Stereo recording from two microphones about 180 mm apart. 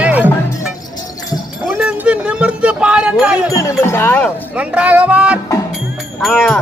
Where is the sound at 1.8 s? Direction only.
5° right (ahead or behind).